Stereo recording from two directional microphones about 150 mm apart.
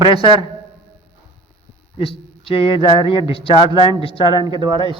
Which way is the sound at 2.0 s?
40° left (ahead or behind).